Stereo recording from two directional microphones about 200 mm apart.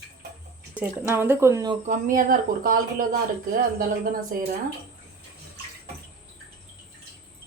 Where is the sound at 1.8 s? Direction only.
40° right (ahead or behind).